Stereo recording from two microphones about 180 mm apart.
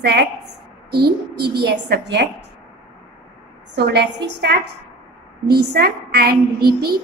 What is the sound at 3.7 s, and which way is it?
A woman's voice, 65° right (ahead or behind).